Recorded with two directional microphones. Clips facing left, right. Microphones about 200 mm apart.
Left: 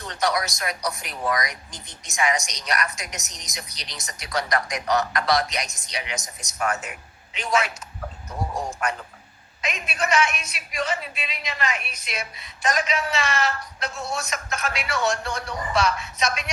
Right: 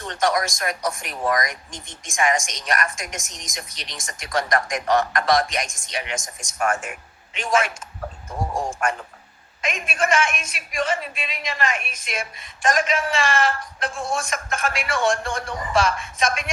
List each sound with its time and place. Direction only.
0.0 s a man's voice: 50° right (ahead or behind)